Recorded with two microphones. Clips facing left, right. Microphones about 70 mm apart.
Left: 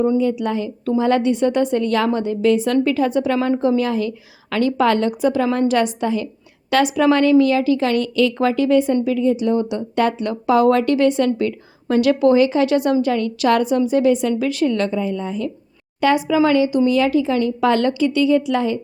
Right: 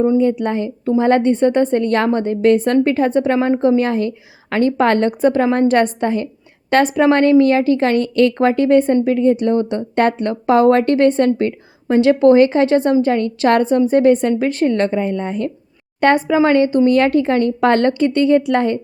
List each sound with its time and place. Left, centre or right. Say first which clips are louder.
0.2 s speech: right 3 dB; right